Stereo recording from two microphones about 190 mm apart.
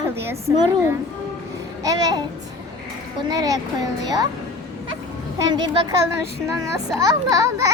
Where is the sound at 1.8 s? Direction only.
20° right (ahead or behind).